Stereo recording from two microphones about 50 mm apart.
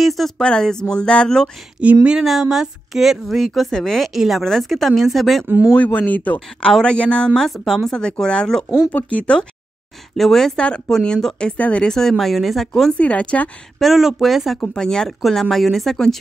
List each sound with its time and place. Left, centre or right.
0.0 s speech: centre
0.4 s speech: centre
1.8 s speech: right
2.5 s a woman's voice: centre
4.1 s a woman's voice: centre
5.9 s speech: left
6.7 s speech: centre
7.4 s speech: centre; by 9.5 s left
10.1 s speech: centre
11.3 s speech: left
11.8 s a woman's voice: centre
12.9 s speech: left
13.7 s a woman's voice: centre
14.8 s a woman's voice: centre